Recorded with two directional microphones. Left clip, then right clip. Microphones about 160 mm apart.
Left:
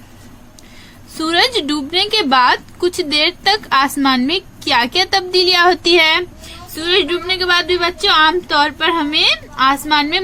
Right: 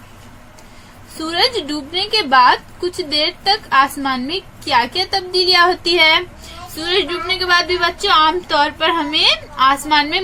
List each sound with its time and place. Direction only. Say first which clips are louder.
1.2 s a woman's voice: left 3 dB; 35° left (ahead or behind)